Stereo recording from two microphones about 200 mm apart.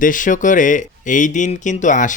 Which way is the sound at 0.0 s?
40° left (ahead or behind).